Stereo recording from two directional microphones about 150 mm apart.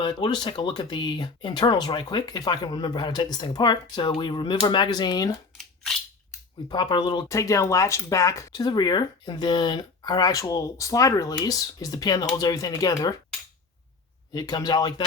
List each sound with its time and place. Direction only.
0.0 s speech: 30° left (ahead or behind)
6.7 s speech: 30° left (ahead or behind)
14.3 s speech: 25° left (ahead or behind)